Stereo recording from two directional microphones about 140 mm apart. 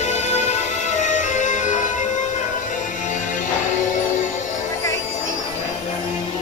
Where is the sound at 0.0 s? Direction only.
55° left (ahead or behind).